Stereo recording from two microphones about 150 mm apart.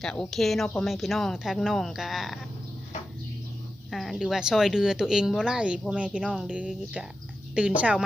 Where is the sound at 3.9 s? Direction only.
Centre (ahead or behind).